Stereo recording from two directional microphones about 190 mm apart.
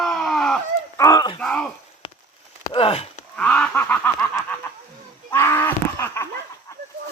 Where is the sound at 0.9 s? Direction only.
20° left (ahead or behind).